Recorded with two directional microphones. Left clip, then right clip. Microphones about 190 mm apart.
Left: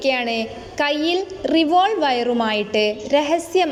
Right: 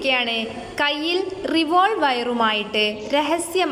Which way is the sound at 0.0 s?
20° left (ahead or behind).